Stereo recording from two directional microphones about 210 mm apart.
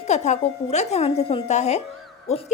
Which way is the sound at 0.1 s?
35° left (ahead or behind).